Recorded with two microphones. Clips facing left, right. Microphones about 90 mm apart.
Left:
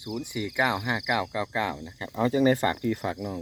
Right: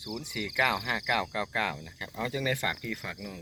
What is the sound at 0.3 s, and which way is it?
Speech, 25° left (ahead or behind).